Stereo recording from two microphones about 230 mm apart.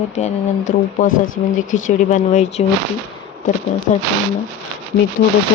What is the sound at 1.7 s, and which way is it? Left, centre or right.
Speech, left.